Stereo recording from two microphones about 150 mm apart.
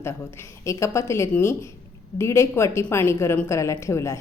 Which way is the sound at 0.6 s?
20° left (ahead or behind).